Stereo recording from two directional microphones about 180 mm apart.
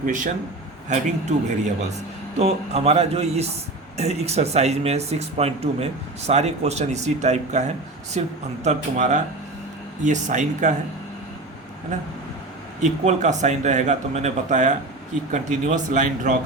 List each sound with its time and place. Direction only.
0.9 s speech: 40° right (ahead or behind)
12.8 s speech: 40° right (ahead or behind)